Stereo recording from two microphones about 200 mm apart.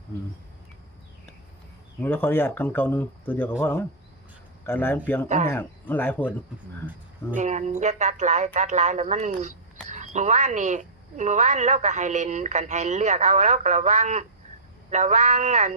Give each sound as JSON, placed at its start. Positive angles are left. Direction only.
{"t": 2.0, "sound": "speech", "side_deg": 10}
{"t": 7.3, "sound": "speech", "side_deg": -35}